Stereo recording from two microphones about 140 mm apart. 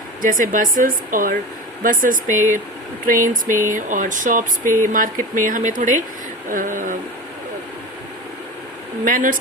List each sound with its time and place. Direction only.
0.2 s speech: 75° right (ahead or behind)
9.0 s speech: 75° right (ahead or behind)